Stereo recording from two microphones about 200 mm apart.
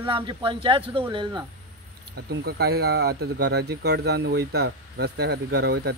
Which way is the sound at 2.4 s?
55° right (ahead or behind).